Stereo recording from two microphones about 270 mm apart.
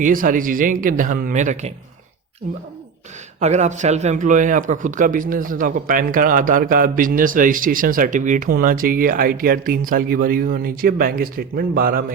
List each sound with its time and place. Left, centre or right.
0.0 s a man's voice: right
3.4 s a man's voice: right